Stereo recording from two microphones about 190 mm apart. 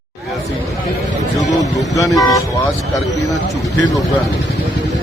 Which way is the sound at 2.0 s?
15° left (ahead or behind).